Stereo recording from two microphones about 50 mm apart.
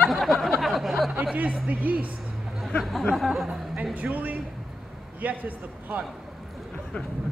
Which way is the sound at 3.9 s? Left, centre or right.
Right.